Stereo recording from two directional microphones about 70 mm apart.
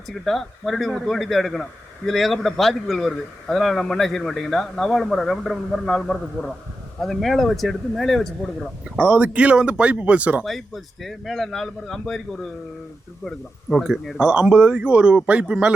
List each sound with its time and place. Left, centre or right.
0.3 s a man's voice: centre
9.0 s speech: centre
10.4 s a man's voice: centre
13.2 s a man's voice: centre
13.8 s speech: centre